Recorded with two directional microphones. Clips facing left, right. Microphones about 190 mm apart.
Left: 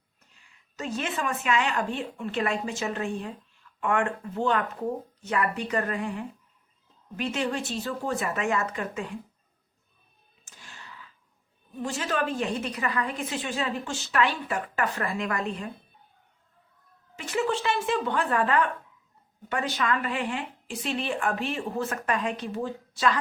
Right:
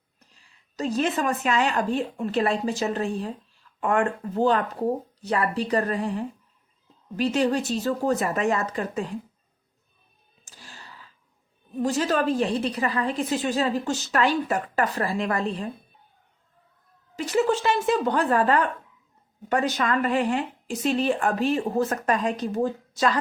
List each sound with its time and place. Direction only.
0.2 s a woman's voice: 35° right (ahead or behind)
10.4 s a sound: 35° right (ahead or behind)
11.8 s a woman's voice: 40° right (ahead or behind)
17.2 s a woman's voice: 35° right (ahead or behind)